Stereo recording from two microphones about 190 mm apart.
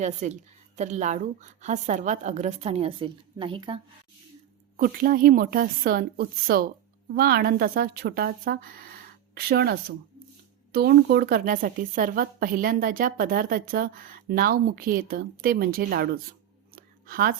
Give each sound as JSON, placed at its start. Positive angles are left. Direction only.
{"t": 0.0, "sound": "a woman's voice", "side_deg": -40}
{"t": 4.8, "sound": "a woman's voice", "side_deg": -45}
{"t": 16.7, "sound": "a sound", "side_deg": -50}